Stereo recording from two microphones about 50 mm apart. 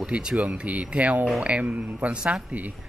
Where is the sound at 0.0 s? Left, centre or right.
Centre.